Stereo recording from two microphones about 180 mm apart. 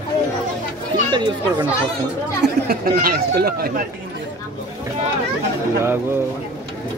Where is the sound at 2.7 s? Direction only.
55° right (ahead or behind).